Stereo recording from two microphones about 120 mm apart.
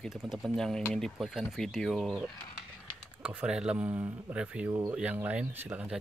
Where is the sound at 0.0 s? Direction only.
Centre (ahead or behind).